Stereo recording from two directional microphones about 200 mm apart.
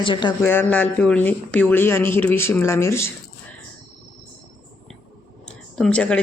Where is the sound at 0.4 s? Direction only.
10° left (ahead or behind).